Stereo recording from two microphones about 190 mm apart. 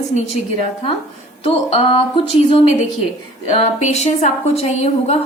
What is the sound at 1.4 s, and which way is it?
Speech, 30° left (ahead or behind).